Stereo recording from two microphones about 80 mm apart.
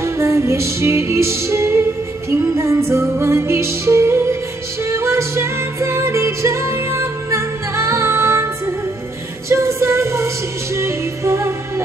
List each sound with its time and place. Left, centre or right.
0.0 s music: right